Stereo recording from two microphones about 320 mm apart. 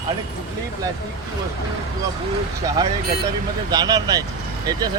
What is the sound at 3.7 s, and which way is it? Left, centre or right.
Speech, centre.